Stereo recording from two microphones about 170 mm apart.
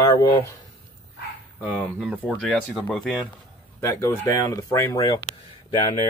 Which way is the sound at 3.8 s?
15° left (ahead or behind).